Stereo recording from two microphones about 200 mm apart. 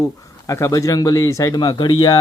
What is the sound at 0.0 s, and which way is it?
Speech, 15° left (ahead or behind).